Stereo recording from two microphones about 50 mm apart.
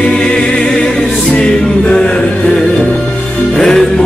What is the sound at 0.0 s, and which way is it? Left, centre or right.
Music, centre.